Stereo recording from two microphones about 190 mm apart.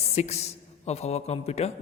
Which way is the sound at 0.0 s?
35° left (ahead or behind).